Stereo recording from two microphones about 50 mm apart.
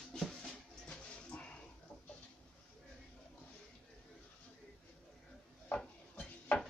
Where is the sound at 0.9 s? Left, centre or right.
Left.